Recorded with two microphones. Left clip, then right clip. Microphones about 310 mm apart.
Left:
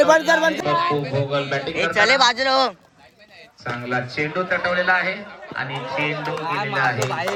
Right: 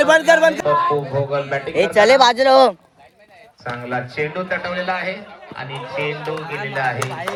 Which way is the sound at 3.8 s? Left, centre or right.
Centre.